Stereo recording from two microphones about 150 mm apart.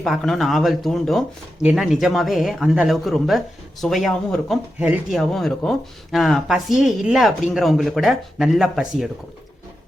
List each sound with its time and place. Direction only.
0.0 s speech: centre (ahead or behind)